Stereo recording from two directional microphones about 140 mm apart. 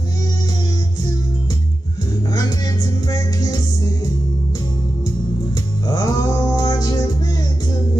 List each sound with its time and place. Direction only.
5.9 s music: 25° left (ahead or behind)